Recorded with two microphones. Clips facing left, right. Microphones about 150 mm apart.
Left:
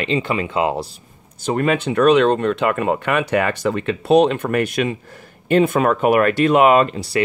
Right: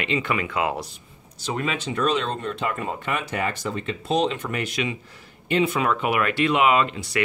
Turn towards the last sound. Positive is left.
turn(degrees=35)  # may be behind; listen again after turning